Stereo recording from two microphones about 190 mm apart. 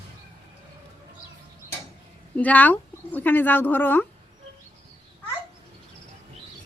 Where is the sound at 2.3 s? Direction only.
10° left (ahead or behind).